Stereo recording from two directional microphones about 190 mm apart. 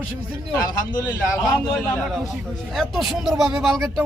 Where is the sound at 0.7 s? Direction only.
20° left (ahead or behind).